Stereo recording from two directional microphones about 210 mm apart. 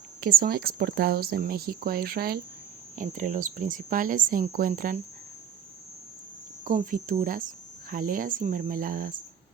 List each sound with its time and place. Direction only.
0.2 s speech: 45° right (ahead or behind)
6.7 s speech: 40° right (ahead or behind)